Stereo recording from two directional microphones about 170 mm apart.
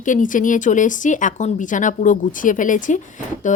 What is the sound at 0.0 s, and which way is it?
Speech, 50° left (ahead or behind).